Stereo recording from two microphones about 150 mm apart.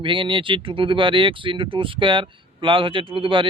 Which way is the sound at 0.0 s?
35° right (ahead or behind).